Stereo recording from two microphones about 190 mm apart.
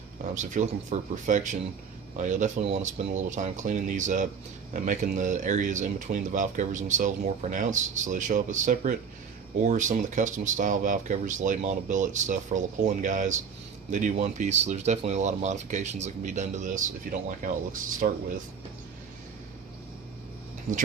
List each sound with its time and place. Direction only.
0.3 s speech: 40° right (ahead or behind)